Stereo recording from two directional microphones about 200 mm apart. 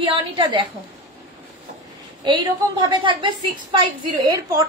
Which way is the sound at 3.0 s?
25° right (ahead or behind).